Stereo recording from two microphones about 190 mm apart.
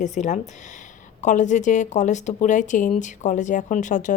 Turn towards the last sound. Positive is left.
turn(degrees=40)  # may be behind; listen again after turning